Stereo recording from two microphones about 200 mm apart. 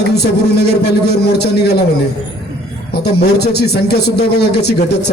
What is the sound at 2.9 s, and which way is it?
A man's voice, 55° left (ahead or behind).